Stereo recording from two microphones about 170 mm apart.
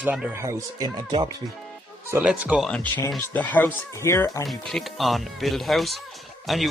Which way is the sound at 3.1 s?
10° left (ahead or behind).